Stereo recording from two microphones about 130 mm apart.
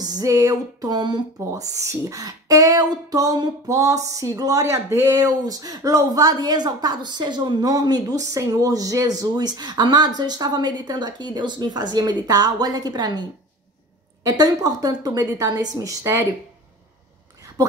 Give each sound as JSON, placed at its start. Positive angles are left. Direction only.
{"t": 0.0, "sound": "speech", "side_deg": -30}
{"t": 14.2, "sound": "speech", "side_deg": -30}